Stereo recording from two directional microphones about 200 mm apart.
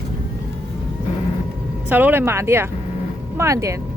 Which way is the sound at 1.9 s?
10° right (ahead or behind).